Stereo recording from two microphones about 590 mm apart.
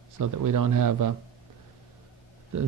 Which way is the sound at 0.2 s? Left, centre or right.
Right.